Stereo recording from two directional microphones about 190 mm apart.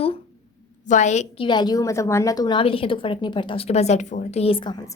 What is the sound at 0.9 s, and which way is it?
Speech, 40° left (ahead or behind).